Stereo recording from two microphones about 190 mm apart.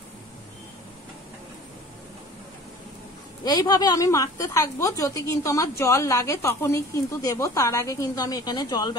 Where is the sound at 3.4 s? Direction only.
20° left (ahead or behind).